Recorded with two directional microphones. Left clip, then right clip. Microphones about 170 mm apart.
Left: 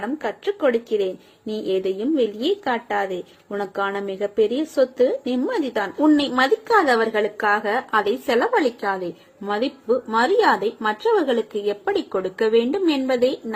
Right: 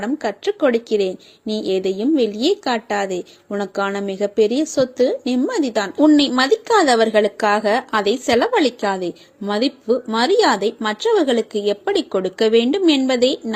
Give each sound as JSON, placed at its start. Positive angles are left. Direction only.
{"t": 0.0, "sound": "speech", "side_deg": -40}